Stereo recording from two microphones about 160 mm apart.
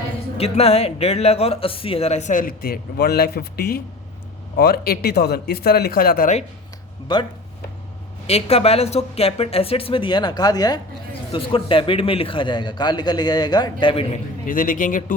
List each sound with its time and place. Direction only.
0.3 s a man's voice: 40° left (ahead or behind); by 6.3 s 65° left (ahead or behind)
7.1 s speech: 30° left (ahead or behind)
8.3 s speech: 40° left (ahead or behind)
14.4 s a man's voice: 55° left (ahead or behind)